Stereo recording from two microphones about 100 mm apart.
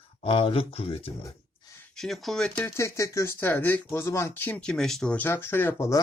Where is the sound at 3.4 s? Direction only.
20° left (ahead or behind).